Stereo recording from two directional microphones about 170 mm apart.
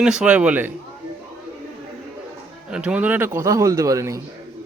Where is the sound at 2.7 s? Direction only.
5° right (ahead or behind).